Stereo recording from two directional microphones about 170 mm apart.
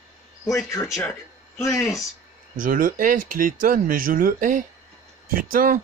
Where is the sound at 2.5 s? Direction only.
55° right (ahead or behind).